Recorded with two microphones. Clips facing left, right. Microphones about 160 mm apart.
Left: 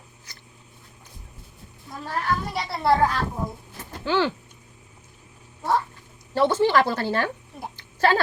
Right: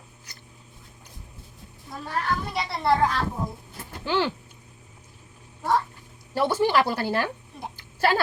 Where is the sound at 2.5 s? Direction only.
Centre (ahead or behind).